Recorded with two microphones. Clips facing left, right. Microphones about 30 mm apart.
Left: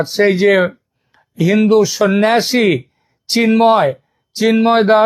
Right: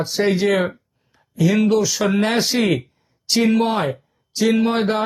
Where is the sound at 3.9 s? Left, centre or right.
Left.